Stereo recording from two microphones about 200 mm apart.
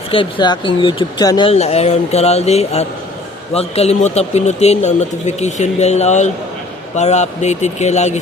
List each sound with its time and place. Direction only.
0.1 s speech: 25° left (ahead or behind)